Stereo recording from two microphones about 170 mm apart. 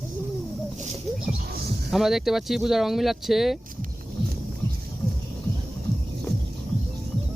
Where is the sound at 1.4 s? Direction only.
65° right (ahead or behind).